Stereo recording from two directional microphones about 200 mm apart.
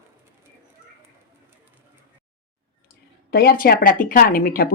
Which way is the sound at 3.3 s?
50° left (ahead or behind).